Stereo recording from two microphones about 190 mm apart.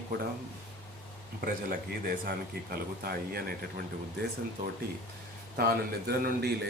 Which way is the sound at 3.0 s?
55° right (ahead or behind).